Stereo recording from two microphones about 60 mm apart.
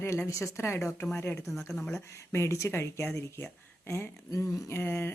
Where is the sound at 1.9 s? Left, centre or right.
Left.